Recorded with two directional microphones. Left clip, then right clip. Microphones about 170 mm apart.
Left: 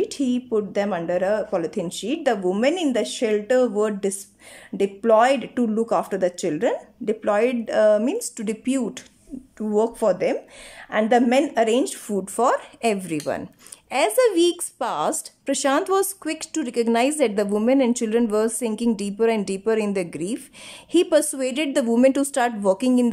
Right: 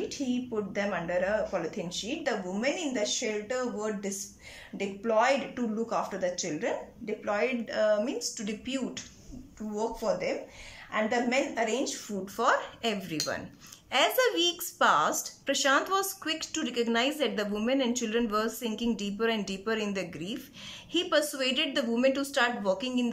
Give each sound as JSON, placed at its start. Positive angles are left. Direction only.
{"t": 0.1, "sound": "speech", "side_deg": 35}